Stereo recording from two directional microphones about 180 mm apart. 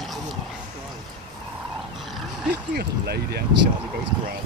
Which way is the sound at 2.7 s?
60° right (ahead or behind).